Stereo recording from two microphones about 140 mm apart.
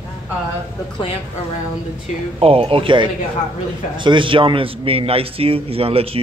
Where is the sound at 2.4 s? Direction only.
45° right (ahead or behind).